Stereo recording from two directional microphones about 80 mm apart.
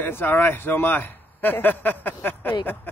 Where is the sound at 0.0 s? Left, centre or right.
Left.